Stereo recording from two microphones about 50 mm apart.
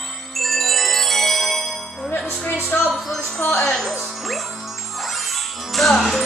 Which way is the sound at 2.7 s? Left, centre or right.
Left.